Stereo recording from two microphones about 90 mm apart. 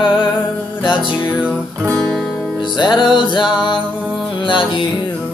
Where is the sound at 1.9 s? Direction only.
10° left (ahead or behind).